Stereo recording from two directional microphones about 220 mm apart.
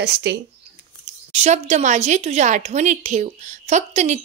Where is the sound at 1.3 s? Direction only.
30° right (ahead or behind).